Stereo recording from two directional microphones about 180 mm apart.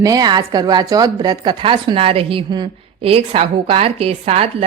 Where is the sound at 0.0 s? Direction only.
20° right (ahead or behind).